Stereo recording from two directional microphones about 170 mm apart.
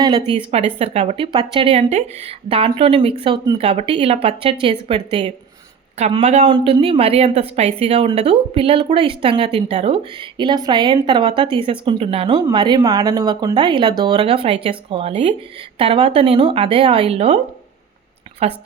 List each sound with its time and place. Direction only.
0.0 s a woman's voice: 25° right (ahead or behind)
0.5 s a woman's voice: 35° right (ahead or behind)
18.4 s a woman's voice: 35° right (ahead or behind)